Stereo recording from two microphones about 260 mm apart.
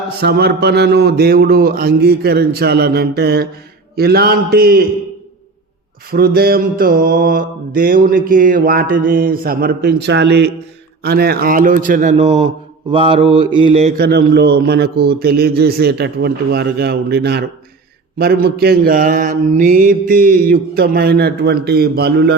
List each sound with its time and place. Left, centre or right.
0.2 s mantra: right
6.1 s mantra: right